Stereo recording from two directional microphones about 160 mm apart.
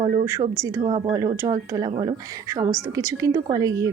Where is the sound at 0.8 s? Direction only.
40° right (ahead or behind).